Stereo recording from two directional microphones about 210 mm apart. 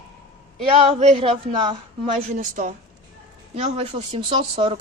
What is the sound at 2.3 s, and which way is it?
A woman's voice, 40° right (ahead or behind).